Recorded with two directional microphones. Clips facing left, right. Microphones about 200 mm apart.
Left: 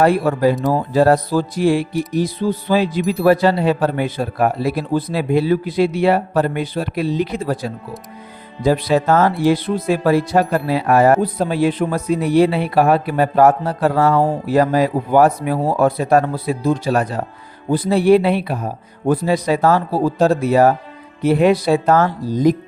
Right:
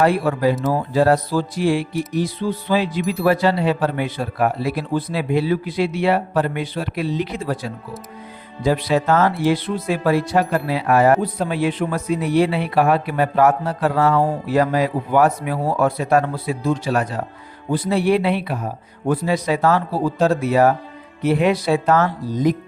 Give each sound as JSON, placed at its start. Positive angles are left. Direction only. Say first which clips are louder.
{"t": 0.0, "sound": "a man's voice", "louder": "left 3 dB", "side_deg": 40}